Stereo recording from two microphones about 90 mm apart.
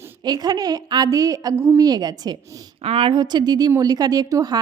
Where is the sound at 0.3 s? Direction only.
45° right (ahead or behind).